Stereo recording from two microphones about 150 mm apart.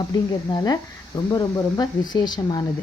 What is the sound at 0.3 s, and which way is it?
Speech, 25° left (ahead or behind).